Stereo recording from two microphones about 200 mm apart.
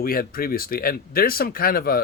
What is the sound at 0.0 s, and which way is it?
Speech, 45° left (ahead or behind).